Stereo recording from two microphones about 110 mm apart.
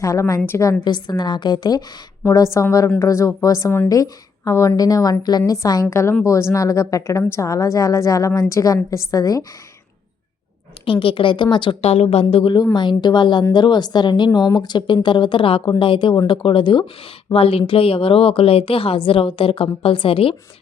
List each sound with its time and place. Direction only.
0.0 s a woman's voice: 30° left (ahead or behind)
0.9 s a woman's voice: 40° left (ahead or behind)
11.0 s speech: 50° left (ahead or behind)
11.9 s a woman's voice: 70° left (ahead or behind)
12.7 s a woman's voice: 45° left (ahead or behind)